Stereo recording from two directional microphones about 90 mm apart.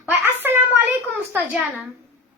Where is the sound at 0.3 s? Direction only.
25° right (ahead or behind).